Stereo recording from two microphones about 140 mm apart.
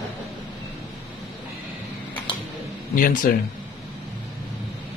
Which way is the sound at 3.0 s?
80° left.